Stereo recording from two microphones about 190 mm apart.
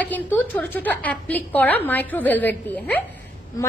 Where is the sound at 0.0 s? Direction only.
10° left (ahead or behind).